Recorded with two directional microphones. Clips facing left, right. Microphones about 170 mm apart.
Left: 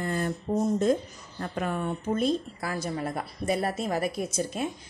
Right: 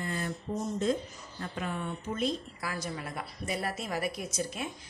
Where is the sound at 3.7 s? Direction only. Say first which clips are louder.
Left 5 dB; 30° left (ahead or behind).